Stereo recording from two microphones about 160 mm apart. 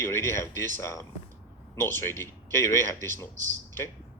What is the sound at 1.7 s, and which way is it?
A man's voice, 15° left (ahead or behind).